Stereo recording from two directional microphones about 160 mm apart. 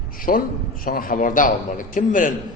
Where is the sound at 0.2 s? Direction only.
60° left (ahead or behind).